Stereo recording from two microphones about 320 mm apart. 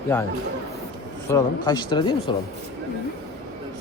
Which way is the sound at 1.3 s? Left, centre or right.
Centre.